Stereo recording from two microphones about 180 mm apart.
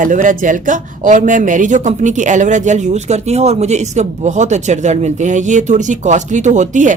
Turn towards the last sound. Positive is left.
turn(degrees=-45)  # may be behind; listen again after turning